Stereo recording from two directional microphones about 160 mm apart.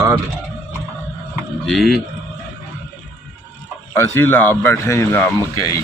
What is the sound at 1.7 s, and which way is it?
Speech, centre (ahead or behind).